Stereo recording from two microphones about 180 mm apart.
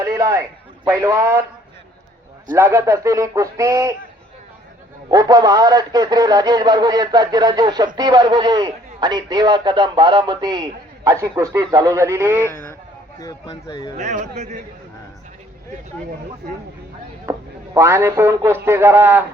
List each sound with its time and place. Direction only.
0.0 s a sound: 15° right (ahead or behind)
0.9 s a man's voice: 15° right (ahead or behind)
2.5 s a man's voice: 15° right (ahead or behind)
5.1 s a man's voice: 20° right (ahead or behind)
13.1 s speech: 20° left (ahead or behind)
13.9 s speech: 40° right (ahead or behind)
17.3 s a sound: 15° right (ahead or behind)
17.7 s a man's voice: 15° right (ahead or behind)